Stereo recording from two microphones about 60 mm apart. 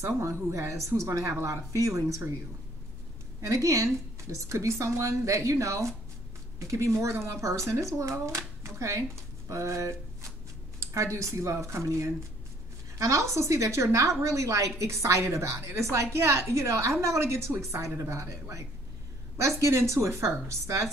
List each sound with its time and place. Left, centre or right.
0.2 s a woman's voice: right
3.3 s a woman's voice: right
4.3 s a woman's voice: right